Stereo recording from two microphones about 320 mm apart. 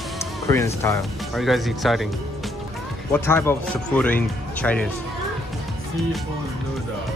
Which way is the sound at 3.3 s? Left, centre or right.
Centre.